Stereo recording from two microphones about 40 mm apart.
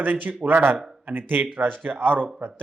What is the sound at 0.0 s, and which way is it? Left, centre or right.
Speech, right.